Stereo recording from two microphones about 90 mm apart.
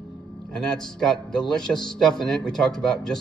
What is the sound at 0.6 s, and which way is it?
A man's voice, 5° left (ahead or behind).